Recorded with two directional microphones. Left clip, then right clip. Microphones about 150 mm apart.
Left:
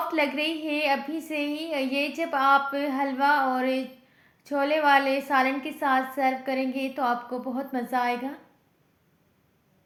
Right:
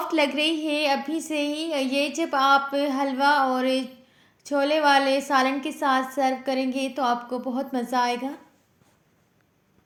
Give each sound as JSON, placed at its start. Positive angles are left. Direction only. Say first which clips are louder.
{"t": 0.1, "sound": "a woman's voice", "louder": "right 3 dB", "side_deg": -30}